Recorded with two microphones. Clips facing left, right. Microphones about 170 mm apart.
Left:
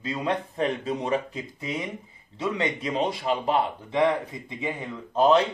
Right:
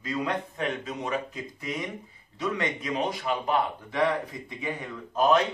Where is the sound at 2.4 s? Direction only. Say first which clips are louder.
Left 2 dB; 25° left (ahead or behind).